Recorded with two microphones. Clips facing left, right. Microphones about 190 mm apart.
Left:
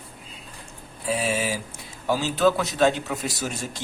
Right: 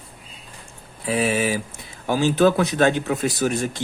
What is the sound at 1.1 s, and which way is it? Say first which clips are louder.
Speech: right 4 dB; 65° right (ahead or behind).